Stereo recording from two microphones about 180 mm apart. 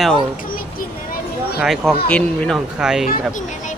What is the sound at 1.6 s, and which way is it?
Speech, centre (ahead or behind).